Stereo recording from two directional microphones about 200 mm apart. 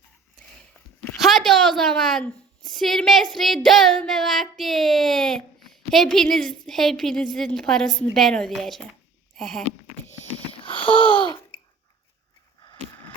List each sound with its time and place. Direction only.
1.2 s a sound: centre (ahead or behind)
3.3 s child singing: centre (ahead or behind)
10.7 s babbling: 5° left (ahead or behind)
11.0 s babbling: 25° left (ahead or behind)